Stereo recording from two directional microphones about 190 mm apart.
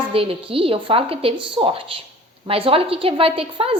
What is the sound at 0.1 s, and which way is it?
A woman's voice, 30° right (ahead or behind).